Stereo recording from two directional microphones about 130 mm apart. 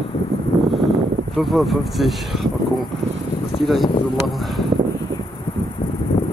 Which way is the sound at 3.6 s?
Centre (ahead or behind).